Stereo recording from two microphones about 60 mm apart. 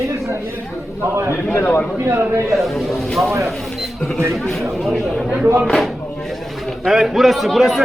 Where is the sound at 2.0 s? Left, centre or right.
Right.